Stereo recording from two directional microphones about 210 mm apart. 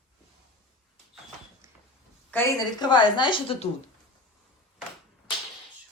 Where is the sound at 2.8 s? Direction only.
20° left (ahead or behind).